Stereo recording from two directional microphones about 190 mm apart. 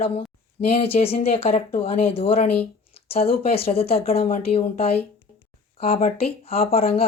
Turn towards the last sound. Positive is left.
turn(degrees=30)  # may be behind; listen again after turning